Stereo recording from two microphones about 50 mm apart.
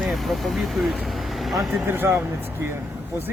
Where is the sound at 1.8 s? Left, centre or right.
Right.